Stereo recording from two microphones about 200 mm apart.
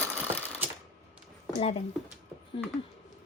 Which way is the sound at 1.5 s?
30° left (ahead or behind).